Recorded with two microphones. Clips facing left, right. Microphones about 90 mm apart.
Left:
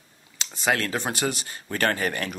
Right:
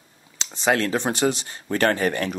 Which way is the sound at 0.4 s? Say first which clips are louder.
Right 4 dB; 20° right (ahead or behind).